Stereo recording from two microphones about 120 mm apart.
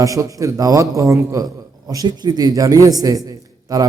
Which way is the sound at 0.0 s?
30° right (ahead or behind).